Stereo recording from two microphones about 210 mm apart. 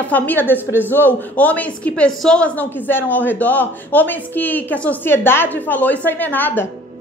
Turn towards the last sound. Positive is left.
turn(degrees=10)  # may be behind; listen again after turning